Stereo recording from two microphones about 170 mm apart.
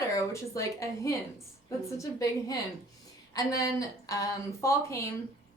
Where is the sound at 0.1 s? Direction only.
20° left (ahead or behind).